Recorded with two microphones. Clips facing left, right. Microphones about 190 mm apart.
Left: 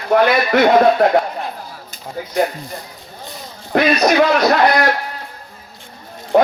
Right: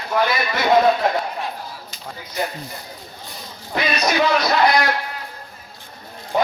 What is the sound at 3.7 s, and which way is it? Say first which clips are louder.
Speech: left 7 dB; 55° left (ahead or behind).